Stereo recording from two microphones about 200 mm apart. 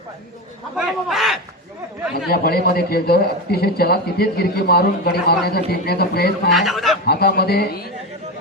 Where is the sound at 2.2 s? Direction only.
50° left (ahead or behind).